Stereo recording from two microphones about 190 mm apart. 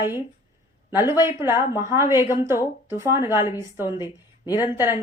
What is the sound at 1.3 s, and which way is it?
Speech, 15° right (ahead or behind).